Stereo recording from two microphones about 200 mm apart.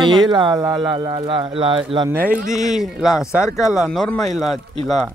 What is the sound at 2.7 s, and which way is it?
Speech, centre (ahead or behind).